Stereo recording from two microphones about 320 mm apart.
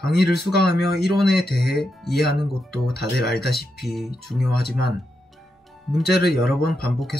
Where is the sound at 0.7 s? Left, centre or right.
Left.